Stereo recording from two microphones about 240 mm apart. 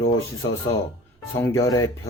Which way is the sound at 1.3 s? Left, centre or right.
Centre.